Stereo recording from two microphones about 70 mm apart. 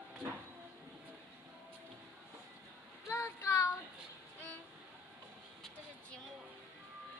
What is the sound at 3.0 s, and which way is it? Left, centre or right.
Child singing, left.